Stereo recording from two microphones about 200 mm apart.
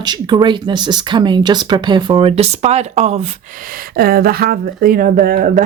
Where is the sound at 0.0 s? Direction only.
20° right (ahead or behind).